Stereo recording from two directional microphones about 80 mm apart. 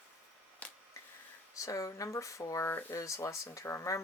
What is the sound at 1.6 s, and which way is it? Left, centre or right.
Speech, left.